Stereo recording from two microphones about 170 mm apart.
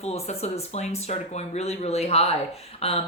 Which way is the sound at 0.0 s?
40° left (ahead or behind).